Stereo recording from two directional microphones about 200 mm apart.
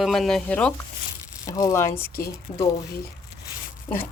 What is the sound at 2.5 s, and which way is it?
Speech, 30° left (ahead or behind).